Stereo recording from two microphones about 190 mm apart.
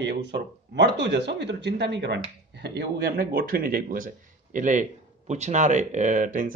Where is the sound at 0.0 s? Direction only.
60° right (ahead or behind).